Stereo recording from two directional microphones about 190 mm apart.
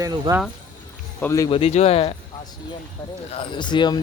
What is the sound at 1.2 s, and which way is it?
Speech, 15° left (ahead or behind).